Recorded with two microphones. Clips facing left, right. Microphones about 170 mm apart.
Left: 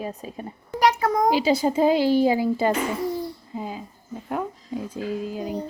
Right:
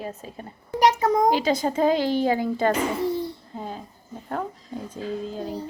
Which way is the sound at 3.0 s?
25° right (ahead or behind).